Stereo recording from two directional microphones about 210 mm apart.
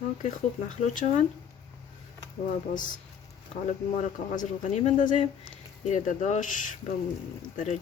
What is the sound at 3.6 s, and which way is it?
Speech, 35° left (ahead or behind).